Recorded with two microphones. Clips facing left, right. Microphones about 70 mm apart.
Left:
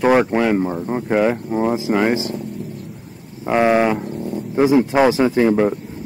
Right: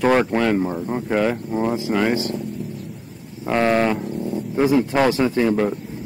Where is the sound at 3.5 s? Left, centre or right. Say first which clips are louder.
Left 3 dB; centre.